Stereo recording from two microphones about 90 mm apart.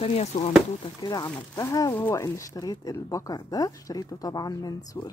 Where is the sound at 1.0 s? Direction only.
50° left (ahead or behind).